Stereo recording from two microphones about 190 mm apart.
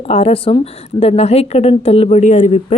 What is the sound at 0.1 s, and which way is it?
A woman's voice, 30° left (ahead or behind).